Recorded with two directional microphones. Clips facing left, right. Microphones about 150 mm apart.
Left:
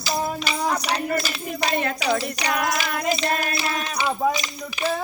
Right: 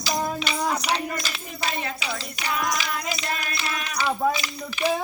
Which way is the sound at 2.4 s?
70° left (ahead or behind).